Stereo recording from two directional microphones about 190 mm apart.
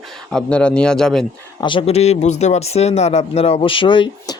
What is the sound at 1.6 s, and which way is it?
Speech, 25° left (ahead or behind).